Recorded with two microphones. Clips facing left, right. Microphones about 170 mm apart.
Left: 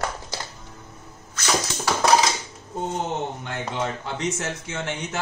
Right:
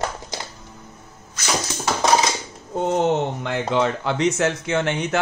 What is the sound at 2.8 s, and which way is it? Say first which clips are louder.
Speech: right 8 dB; 80° right.